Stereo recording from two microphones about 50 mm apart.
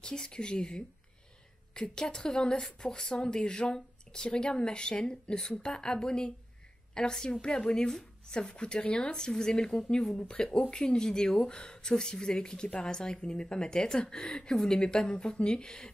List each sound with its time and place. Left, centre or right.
0.0 s a woman's voice: centre